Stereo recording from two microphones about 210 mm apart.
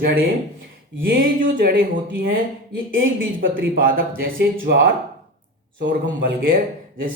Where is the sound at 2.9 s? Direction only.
40° right (ahead or behind).